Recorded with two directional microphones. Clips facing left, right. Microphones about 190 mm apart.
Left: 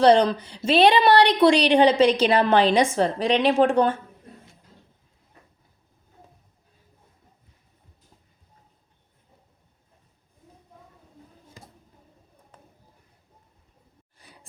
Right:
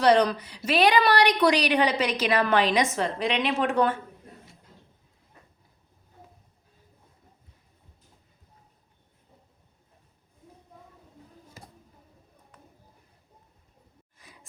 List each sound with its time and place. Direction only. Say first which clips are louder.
0.0 s a woman's voice: left 4 dB; 30° left (ahead or behind)